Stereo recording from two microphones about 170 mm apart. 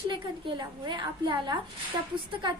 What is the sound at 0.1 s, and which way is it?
A woman's voice, 25° right (ahead or behind).